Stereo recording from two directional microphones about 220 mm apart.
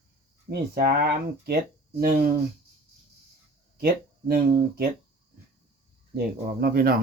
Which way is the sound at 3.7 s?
45° right (ahead or behind).